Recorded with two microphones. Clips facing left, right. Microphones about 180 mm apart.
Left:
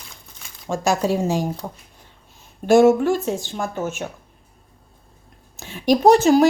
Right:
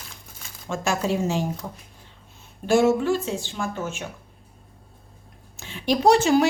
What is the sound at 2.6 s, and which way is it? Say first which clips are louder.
A woman's voice: left 5 dB; 50° left (ahead or behind).